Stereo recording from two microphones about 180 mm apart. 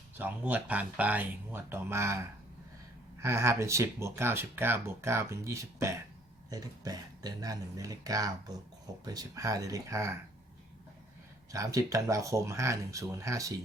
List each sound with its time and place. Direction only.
0.2 s speech: 10° right (ahead or behind)
11.5 s speech: 15° right (ahead or behind)